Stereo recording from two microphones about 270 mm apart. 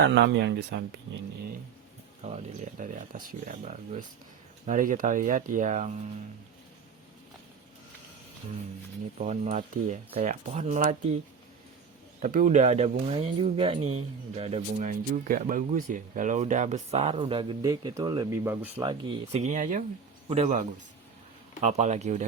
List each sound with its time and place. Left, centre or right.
0.1 s speech: right
2.2 s speech: right
9.1 s speech: right
12.2 s speech: right; by 18.7 s centre
18.7 s speech: centre